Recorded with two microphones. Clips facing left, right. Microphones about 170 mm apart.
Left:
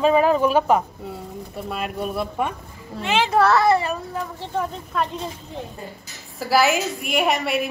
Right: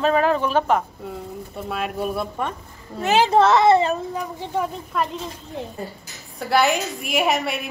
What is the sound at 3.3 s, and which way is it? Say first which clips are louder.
A child's voice: right 2 dB; 20° right (ahead or behind).